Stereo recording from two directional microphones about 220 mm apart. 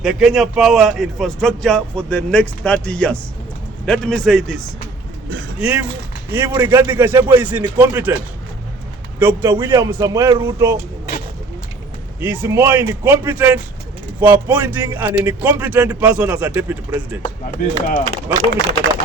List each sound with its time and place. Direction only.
0.0 s speech: centre (ahead or behind)
12.2 s speech: 10° right (ahead or behind)
17.2 s speech: 35° left (ahead or behind)